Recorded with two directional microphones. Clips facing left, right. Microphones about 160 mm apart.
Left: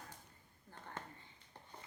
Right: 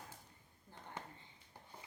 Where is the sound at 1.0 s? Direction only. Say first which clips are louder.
Even; 10° right (ahead or behind).